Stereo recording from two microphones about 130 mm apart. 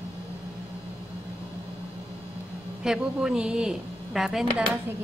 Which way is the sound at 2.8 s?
5° right (ahead or behind).